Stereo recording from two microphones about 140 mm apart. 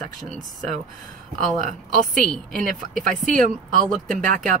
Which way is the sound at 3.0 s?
70° right (ahead or behind).